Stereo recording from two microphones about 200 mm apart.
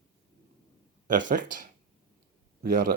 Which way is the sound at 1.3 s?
40° right (ahead or behind).